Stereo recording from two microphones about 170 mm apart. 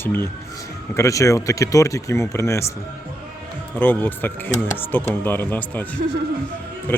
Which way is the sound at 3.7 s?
10° left (ahead or behind).